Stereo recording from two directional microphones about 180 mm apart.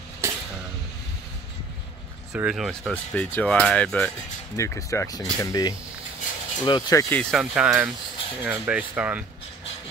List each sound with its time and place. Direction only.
0.2 s vehicle: 15° right (ahead or behind)
2.3 s speech: 5° right (ahead or behind); by 7.2 s 20° left (ahead or behind)
7.2 s speech: centre (ahead or behind)